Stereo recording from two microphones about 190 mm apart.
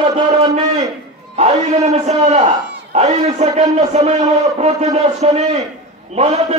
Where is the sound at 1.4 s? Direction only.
35° right (ahead or behind).